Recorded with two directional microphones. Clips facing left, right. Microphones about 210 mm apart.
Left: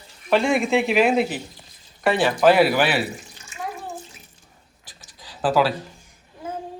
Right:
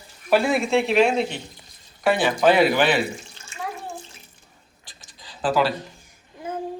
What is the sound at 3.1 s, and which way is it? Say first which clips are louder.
Bathtub: right 1 dB; 20° left (ahead or behind).